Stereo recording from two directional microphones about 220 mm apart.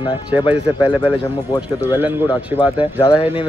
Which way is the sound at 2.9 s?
20° left (ahead or behind).